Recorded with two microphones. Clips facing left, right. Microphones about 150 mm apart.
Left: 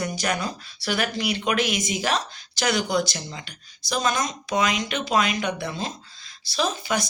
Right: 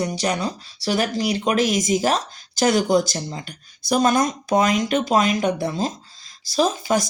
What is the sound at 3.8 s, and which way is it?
Speech, 55° right (ahead or behind).